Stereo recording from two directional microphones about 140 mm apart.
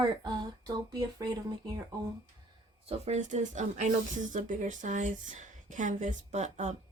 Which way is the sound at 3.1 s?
55° right (ahead or behind).